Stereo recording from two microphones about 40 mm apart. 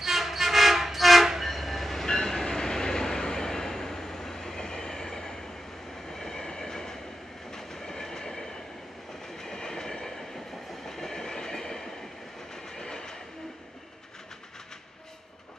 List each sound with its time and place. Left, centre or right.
0.0 s train: centre